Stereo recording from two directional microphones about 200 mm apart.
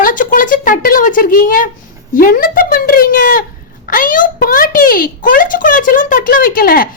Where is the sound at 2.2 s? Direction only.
45° left (ahead or behind).